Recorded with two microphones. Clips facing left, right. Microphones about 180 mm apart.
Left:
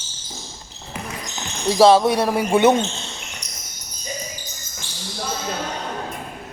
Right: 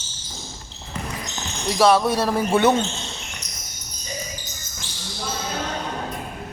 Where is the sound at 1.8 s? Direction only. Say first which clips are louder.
Left 4 dB; 30° left (ahead or behind).